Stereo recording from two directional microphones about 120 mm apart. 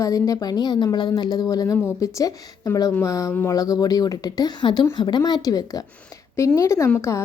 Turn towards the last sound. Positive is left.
turn(degrees=25)  # may be behind; listen again after turning